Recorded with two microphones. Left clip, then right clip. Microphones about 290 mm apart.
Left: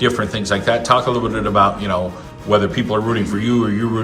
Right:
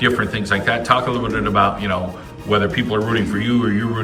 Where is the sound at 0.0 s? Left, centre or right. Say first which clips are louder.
Even; centre.